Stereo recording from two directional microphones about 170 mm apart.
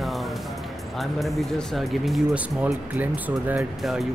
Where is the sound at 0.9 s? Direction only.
Centre (ahead or behind).